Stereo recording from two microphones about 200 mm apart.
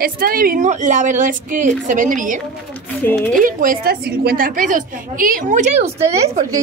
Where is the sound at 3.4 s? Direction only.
45° right (ahead or behind).